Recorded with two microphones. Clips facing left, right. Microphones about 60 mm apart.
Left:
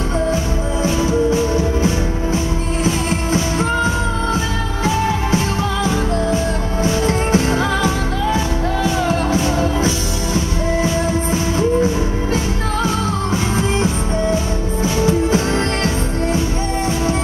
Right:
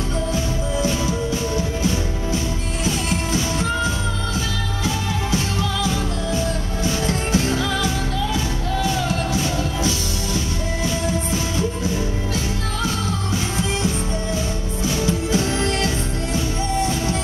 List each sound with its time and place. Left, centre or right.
0.8 s music: left
6.8 s music: left
14.8 s music: left